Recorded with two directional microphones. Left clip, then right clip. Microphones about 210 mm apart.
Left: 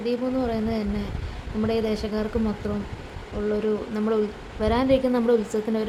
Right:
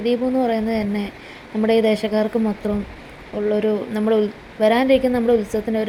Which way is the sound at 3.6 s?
15° right (ahead or behind).